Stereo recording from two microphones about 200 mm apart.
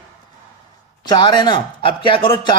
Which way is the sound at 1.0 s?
20° left (ahead or behind).